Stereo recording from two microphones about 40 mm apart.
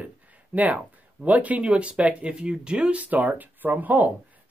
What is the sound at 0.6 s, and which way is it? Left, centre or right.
Speech, right.